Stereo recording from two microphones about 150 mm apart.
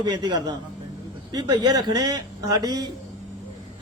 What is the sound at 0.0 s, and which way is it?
A man's voice, 25° right (ahead or behind).